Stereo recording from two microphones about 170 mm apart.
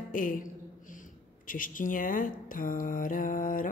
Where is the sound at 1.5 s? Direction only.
50° left (ahead or behind).